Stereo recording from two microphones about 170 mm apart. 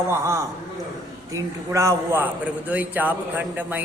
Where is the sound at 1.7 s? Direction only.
15° right (ahead or behind).